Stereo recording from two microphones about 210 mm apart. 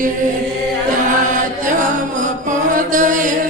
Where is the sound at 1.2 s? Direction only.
40° right (ahead or behind).